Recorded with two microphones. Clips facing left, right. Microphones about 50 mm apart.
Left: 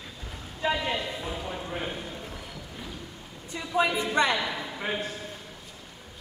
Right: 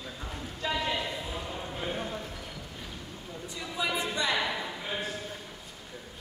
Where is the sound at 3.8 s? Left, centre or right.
Left.